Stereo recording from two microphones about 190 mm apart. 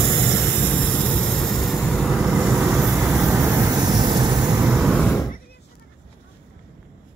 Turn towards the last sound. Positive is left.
turn(degrees=5)  # may be behind; listen again after turning